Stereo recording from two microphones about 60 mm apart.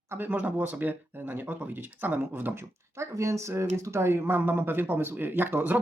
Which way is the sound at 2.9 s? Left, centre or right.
Right.